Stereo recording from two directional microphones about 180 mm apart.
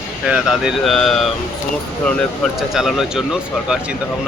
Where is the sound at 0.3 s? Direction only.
5° right (ahead or behind).